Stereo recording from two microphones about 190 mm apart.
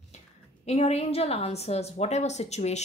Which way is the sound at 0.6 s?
35° left (ahead or behind).